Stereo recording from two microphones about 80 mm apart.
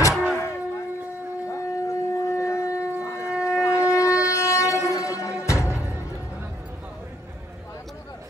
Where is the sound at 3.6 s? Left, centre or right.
Left.